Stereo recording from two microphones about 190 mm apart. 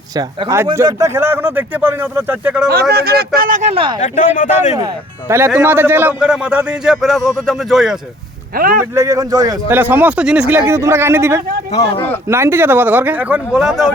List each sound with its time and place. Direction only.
0.2 s a man's voice: 20° right (ahead or behind)
2.9 s speech: 55° right (ahead or behind)
4.0 s speech: 40° left (ahead or behind)
5.5 s a man's voice: 10° right (ahead or behind)
8.5 s speech: 50° right (ahead or behind)
9.0 s a man's voice: 15° right (ahead or behind); by 13.9 s centre (ahead or behind)